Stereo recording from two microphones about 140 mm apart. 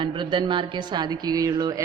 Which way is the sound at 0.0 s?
35° right (ahead or behind).